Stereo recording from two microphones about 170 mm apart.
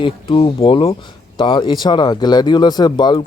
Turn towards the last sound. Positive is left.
turn(degrees=25)  # may be behind; listen again after turning